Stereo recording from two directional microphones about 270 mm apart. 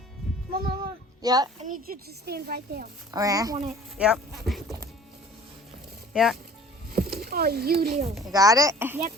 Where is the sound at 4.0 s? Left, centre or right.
Centre.